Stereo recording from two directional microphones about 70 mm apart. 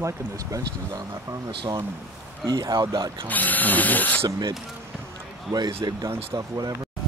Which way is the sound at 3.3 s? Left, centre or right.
Left.